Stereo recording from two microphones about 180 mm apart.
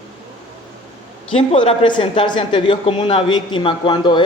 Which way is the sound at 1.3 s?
30° left (ahead or behind).